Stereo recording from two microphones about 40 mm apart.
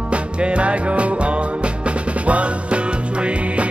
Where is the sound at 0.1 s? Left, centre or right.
Right.